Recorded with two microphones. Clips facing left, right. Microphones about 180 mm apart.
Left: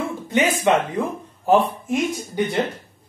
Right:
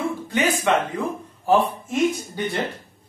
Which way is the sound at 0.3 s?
20° left (ahead or behind).